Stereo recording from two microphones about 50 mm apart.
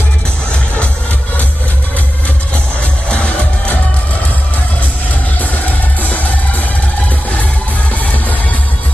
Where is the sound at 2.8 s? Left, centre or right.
Left.